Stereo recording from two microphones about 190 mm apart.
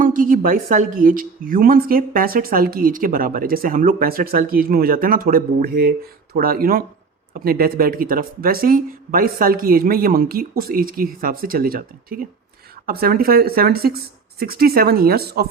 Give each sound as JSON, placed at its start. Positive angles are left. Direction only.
{"t": 0.0, "sound": "a woman's voice", "side_deg": -45}